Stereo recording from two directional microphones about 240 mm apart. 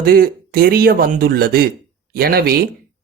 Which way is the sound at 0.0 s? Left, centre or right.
Right.